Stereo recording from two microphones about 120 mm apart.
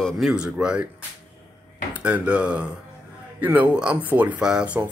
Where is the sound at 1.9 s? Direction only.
10° right (ahead or behind).